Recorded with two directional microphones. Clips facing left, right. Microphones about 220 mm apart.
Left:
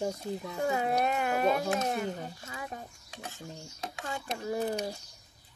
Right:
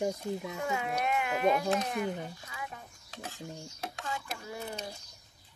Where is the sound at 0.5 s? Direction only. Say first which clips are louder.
Left 9 dB; 35° left (ahead or behind).